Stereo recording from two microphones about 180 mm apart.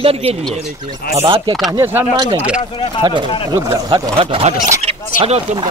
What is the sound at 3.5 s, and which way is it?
Speech, 20° right (ahead or behind).